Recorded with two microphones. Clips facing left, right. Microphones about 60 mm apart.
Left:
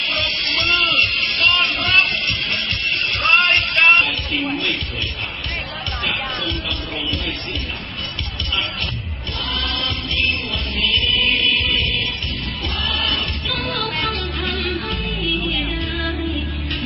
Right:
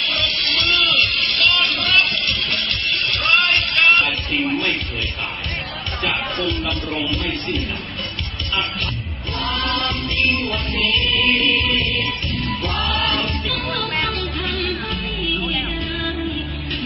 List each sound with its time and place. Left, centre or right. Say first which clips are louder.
0.0 s music: even; left
4.4 s music: right 3 dB; centre
6.0 s music: right 2 dB; centre
9.6 s music: right 2 dB; right
11.6 s music: right 1 dB; right
12.6 s music: right 1 dB; right
13.5 s music: even; centre